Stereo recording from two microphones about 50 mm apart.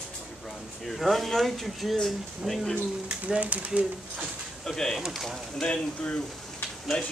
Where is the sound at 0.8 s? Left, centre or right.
Centre.